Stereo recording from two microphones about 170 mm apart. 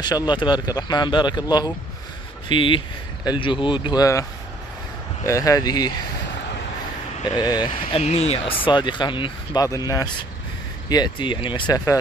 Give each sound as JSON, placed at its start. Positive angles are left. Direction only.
{"t": 0.0, "sound": "speech", "side_deg": 25}
{"t": 7.3, "sound": "speech", "side_deg": 25}
{"t": 7.9, "sound": "speech", "side_deg": 40}